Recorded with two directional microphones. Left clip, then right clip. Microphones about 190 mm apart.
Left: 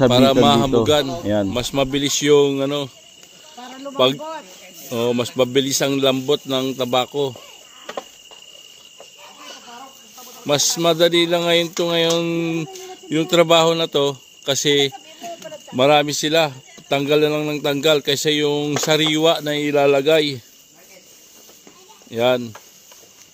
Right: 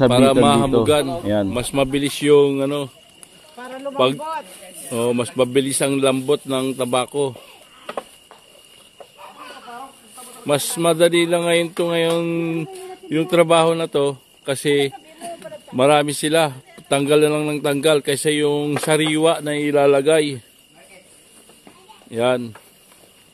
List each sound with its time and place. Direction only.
0.0 s a man's voice: 5° left (ahead or behind)
4.2 s speech: 45° right (ahead or behind)
4.9 s a man's voice: 10° left (ahead or behind)
10.4 s a man's voice: 5° left (ahead or behind)
22.1 s a man's voice: 10° left (ahead or behind)